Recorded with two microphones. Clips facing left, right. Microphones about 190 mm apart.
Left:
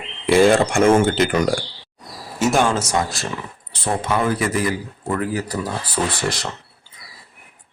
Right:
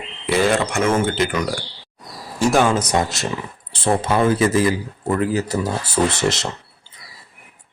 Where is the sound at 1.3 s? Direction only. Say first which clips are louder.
Left 4 dB; 50° left (ahead or behind).